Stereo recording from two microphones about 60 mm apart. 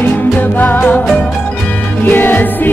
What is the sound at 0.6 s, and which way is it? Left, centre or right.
Music, left.